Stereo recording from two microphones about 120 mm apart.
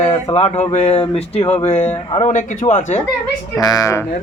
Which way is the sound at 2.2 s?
90° left.